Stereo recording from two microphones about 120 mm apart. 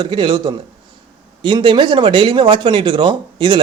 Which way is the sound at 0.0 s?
40° right (ahead or behind).